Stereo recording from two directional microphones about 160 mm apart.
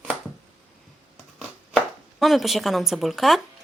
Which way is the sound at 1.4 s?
Centre (ahead or behind).